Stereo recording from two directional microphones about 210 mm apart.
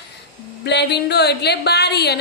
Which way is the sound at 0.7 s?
55° left (ahead or behind).